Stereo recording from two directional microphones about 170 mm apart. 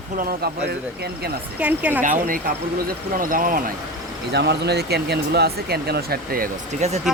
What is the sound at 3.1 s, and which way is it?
Speech, 55° right (ahead or behind).